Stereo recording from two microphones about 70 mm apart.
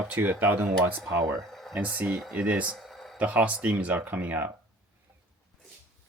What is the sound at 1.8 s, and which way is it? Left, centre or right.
Speech, right.